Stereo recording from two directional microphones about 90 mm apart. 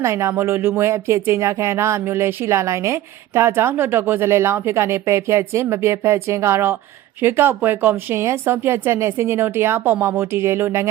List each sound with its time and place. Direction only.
0.0 s speech: 30° right (ahead or behind)